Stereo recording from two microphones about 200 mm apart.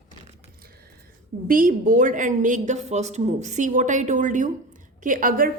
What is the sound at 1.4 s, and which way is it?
A woman's voice, 45° right (ahead or behind).